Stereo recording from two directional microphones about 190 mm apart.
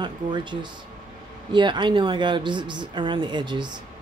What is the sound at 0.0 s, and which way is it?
Speech, 25° right (ahead or behind).